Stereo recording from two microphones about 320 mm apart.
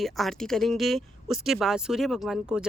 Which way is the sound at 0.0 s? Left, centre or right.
Centre.